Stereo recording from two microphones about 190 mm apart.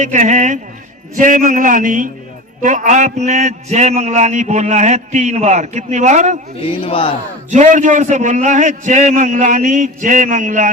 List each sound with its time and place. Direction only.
0.0 s a man's voice: 40° right (ahead or behind)
6.6 s speech: 30° left (ahead or behind)
7.5 s a man's voice: 40° right (ahead or behind)